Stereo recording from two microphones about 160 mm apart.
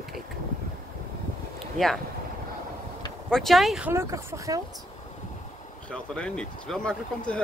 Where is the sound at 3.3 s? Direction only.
Centre (ahead or behind).